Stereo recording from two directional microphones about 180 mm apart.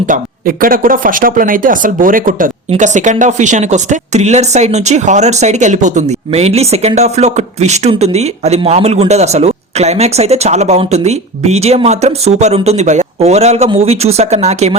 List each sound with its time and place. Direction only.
0.1 s speech: 50° right (ahead or behind)